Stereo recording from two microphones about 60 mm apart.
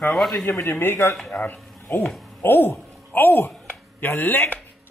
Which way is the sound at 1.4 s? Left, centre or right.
Left.